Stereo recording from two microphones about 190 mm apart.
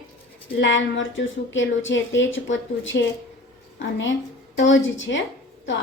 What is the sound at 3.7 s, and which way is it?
A woman's voice, 80° left.